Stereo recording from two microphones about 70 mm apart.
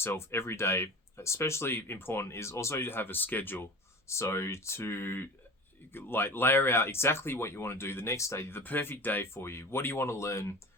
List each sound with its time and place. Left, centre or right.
0.0 s speech: left
4.0 s speech: left